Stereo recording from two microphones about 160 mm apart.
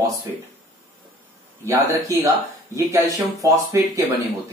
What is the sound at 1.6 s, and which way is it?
Speech, 20° right (ahead or behind).